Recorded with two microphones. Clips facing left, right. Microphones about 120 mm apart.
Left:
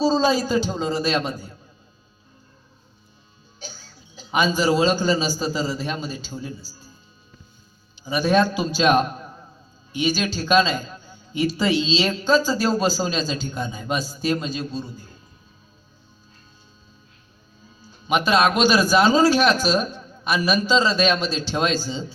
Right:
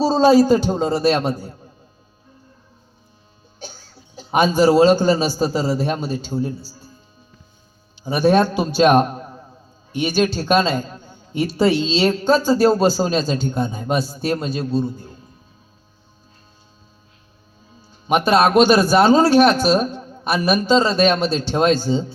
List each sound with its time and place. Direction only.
0.0 s a man's voice: 60° right (ahead or behind)
4.3 s a man's voice: 60° right (ahead or behind)
8.0 s a man's voice: 60° right (ahead or behind)
17.8 s a man's voice: 50° right (ahead or behind)